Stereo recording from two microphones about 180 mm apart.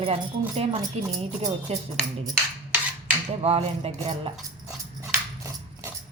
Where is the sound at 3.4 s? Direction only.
35° right (ahead or behind).